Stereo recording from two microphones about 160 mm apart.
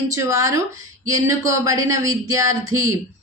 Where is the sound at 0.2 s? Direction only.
20° right (ahead or behind).